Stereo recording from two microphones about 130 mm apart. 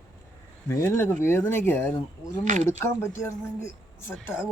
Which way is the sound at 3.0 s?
20° left (ahead or behind).